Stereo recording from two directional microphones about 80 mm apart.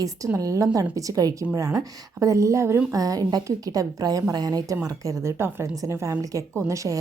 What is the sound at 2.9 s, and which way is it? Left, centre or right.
A woman's voice, right.